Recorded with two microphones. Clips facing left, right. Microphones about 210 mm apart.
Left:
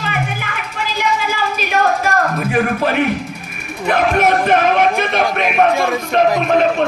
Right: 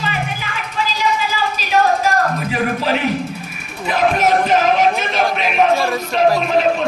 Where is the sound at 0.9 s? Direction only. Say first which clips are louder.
Left 2 dB; 55° left (ahead or behind).